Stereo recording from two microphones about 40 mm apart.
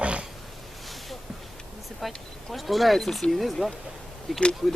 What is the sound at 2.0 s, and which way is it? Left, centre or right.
Speech, centre.